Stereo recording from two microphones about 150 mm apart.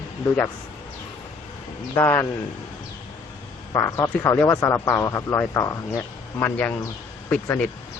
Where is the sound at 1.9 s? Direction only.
15° left (ahead or behind).